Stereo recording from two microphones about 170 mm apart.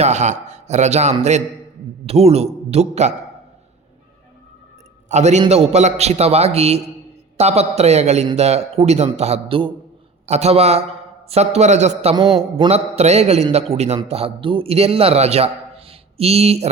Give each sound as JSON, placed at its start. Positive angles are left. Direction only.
{"t": 0.0, "sound": "a man's voice", "side_deg": -40}
{"t": 5.0, "sound": "a man's voice", "side_deg": -45}
{"t": 12.1, "sound": "a man's voice", "side_deg": -25}
{"t": 12.5, "sound": "a man's voice", "side_deg": -35}